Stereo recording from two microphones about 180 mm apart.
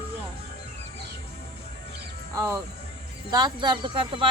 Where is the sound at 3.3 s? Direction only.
25° right (ahead or behind).